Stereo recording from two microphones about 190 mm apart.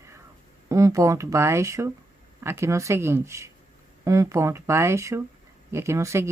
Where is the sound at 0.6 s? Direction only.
15° right (ahead or behind).